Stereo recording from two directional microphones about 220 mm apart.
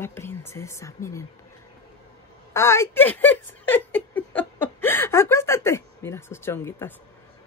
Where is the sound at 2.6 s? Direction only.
10° left (ahead or behind).